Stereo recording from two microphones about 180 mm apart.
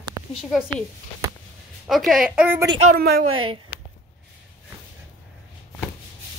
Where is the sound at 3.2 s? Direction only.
30° right (ahead or behind).